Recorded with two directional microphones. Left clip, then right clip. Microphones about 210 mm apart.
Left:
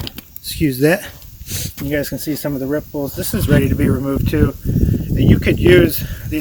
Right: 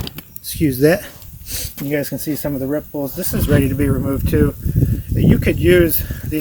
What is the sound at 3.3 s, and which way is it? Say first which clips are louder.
Speech: left 1 dB; 20° right (ahead or behind).